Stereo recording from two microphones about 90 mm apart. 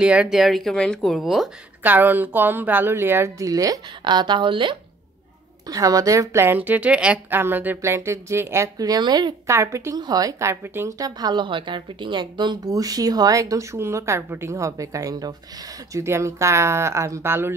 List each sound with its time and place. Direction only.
0.0 s speech: 10° right (ahead or behind)
1.8 s speech: 20° right (ahead or behind)
3.4 s a woman's voice: 40° right (ahead or behind)
4.0 s a woman's voice: 55° right (ahead or behind)
5.7 s a woman's voice: 40° right (ahead or behind)
6.4 s speech: 20° right (ahead or behind)
8.7 s speech: 45° right (ahead or behind)
9.5 s a woman's voice: 30° right (ahead or behind)
9.9 s speech: 45° right (ahead or behind)
10.5 s speech: 25° right (ahead or behind)
10.9 s a woman's voice: 45° right (ahead or behind)
15.9 s a woman's voice: 30° right (ahead or behind)